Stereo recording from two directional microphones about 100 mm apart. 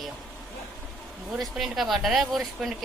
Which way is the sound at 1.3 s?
Centre (ahead or behind).